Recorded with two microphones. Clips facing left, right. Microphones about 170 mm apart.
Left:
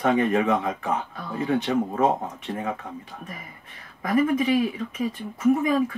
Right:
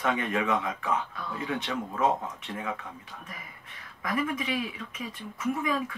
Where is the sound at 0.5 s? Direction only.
45° left (ahead or behind).